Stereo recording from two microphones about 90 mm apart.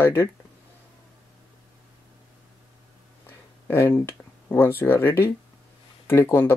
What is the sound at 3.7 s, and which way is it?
Speech, 25° left (ahead or behind).